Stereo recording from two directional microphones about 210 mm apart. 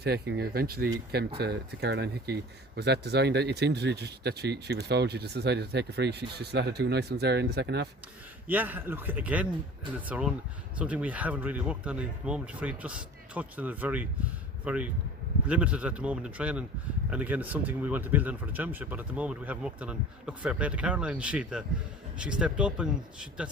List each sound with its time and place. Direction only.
0.0 s speech: 50° right (ahead or behind)
8.4 s speech: 10° right (ahead or behind)